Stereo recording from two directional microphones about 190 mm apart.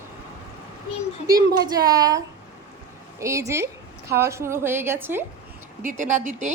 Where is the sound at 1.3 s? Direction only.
20° right (ahead or behind).